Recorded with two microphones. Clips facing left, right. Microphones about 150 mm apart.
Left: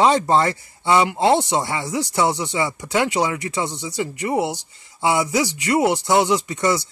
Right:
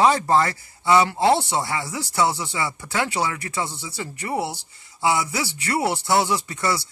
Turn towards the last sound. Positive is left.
turn(degrees=20)  # may be behind; listen again after turning